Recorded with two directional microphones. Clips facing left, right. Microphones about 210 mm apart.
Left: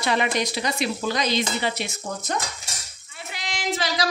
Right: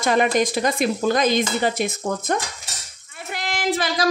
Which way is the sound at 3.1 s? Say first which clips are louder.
Right 5 dB; 55° right (ahead or behind).